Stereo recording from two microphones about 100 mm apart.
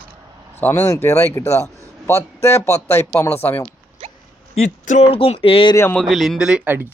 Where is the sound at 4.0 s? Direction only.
65° right (ahead or behind).